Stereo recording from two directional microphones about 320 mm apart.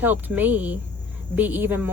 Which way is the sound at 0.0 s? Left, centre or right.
Centre.